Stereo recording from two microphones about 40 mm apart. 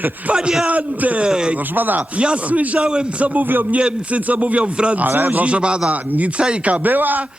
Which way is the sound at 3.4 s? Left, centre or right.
Right.